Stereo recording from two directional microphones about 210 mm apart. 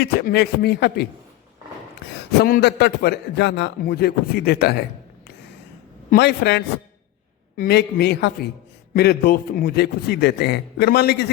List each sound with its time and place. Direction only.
0.0 s a man's voice: 50° left (ahead or behind)
2.4 s a man's voice: 50° left (ahead or behind)
6.1 s a man's voice: 50° left (ahead or behind)